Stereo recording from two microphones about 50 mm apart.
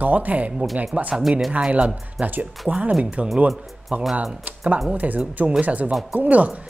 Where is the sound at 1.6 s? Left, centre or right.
Right.